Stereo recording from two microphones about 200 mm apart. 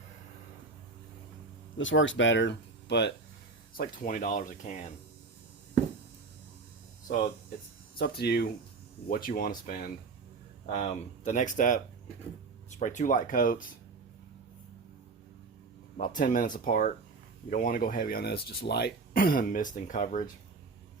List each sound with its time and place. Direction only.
1.8 s speech: 70° left (ahead or behind)
3.8 s speech: 40° left (ahead or behind)
7.9 s speech: 50° left (ahead or behind)
10.7 s speech: 35° left (ahead or behind)
12.8 s speech: 40° left (ahead or behind)
16.0 s speech: 40° left (ahead or behind)